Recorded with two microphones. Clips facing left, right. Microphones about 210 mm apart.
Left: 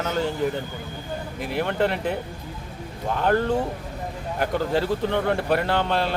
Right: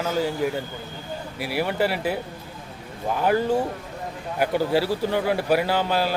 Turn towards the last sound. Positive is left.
turn(degrees=-5)  # may be behind; listen again after turning